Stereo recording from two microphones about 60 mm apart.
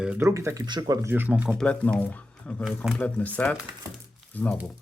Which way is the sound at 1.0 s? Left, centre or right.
Right.